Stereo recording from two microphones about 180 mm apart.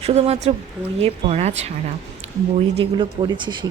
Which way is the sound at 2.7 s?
30° right (ahead or behind).